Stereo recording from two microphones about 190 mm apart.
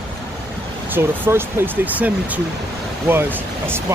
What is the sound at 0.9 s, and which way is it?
Speech, 10° right (ahead or behind).